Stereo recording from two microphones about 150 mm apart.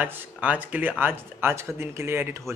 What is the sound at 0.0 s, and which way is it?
Speech, 10° right (ahead or behind).